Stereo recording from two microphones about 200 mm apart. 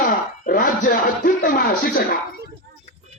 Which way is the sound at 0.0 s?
45° left (ahead or behind).